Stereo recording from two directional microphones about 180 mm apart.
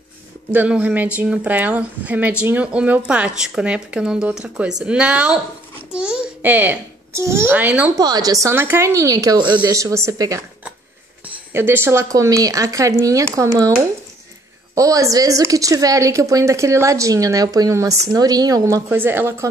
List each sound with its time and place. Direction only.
0.5 s a woman's voice: 10° right (ahead or behind)
8.0 s a woman's voice: 20° right (ahead or behind)
11.5 s a woman's voice: 15° right (ahead or behind)
14.8 s a woman's voice: 20° right (ahead or behind)